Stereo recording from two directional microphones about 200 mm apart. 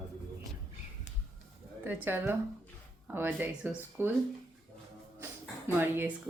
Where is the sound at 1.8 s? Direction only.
10° right (ahead or behind).